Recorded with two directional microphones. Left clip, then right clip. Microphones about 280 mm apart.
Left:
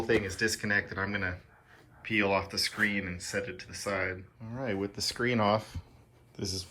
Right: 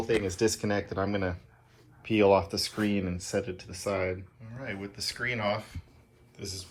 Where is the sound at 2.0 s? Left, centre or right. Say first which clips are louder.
Right 5 dB; centre.